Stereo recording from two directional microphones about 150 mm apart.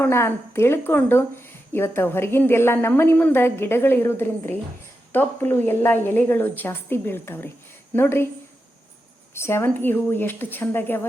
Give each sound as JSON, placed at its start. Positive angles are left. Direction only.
{"t": 0.0, "sound": "speech", "side_deg": 15}
{"t": 9.3, "sound": "speech", "side_deg": 15}